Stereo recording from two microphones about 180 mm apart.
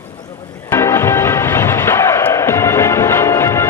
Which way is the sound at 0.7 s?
15° left (ahead or behind).